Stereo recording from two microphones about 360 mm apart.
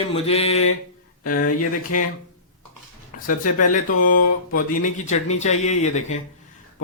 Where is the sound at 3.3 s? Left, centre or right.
Left.